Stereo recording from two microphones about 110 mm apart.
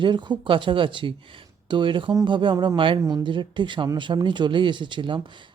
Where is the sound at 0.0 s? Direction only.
45° right (ahead or behind).